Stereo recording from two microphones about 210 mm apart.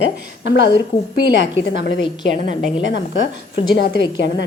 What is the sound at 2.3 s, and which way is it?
Speech, 35° right (ahead or behind).